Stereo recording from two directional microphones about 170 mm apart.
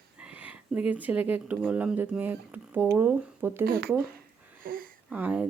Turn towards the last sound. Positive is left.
turn(degrees=-10)  # may be behind; listen again after turning